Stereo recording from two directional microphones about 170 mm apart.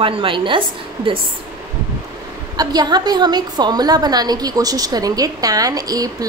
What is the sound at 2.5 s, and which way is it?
A woman's voice, 25° right (ahead or behind).